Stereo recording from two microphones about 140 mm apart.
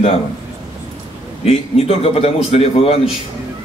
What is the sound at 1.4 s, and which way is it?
A man's voice, 45° left (ahead or behind).